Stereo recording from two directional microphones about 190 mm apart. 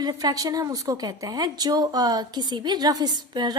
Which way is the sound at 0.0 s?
20° right (ahead or behind).